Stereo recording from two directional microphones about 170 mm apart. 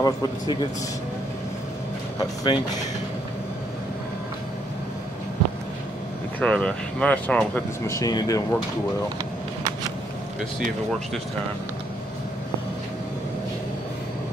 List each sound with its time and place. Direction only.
0.0 s a man's voice: 25° left (ahead or behind)
2.1 s a man's voice: 30° left (ahead or behind)
6.4 s speech: 5° left (ahead or behind); by 8.5 s 20° left (ahead or behind)